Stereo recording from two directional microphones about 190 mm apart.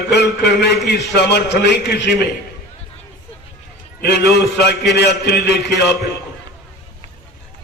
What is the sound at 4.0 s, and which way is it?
A man's voice, 60° left (ahead or behind).